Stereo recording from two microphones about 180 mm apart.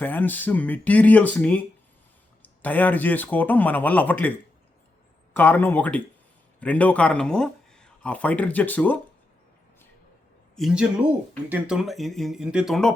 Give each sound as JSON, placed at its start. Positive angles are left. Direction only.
{"t": 0.0, "sound": "speech", "side_deg": 10}
{"t": 10.5, "sound": "speech", "side_deg": 0}